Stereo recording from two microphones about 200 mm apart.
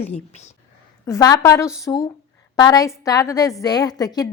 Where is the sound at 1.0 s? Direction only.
15° left (ahead or behind).